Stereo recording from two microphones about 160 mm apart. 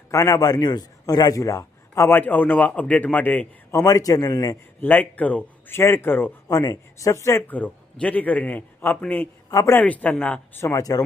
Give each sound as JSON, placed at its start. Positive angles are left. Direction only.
{"t": 0.1, "sound": "a man's voice", "side_deg": 20}
{"t": 4.8, "sound": "a man's voice", "side_deg": 10}
{"t": 6.5, "sound": "a man's voice", "side_deg": 25}